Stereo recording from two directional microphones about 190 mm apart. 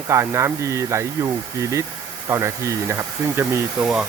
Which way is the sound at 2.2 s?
15° right (ahead or behind).